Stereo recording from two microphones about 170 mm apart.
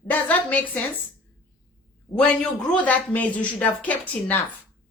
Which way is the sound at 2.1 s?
25° left (ahead or behind).